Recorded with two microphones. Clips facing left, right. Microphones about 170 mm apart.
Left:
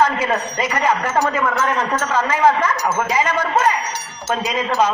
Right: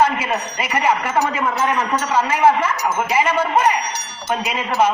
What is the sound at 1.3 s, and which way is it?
Speech, 25° right (ahead or behind).